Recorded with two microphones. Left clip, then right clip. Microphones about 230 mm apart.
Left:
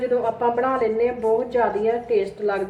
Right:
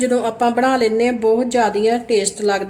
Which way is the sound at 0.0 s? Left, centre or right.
Right.